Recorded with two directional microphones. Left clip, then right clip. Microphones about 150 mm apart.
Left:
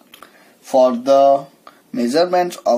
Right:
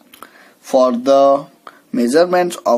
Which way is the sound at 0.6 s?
55° right (ahead or behind).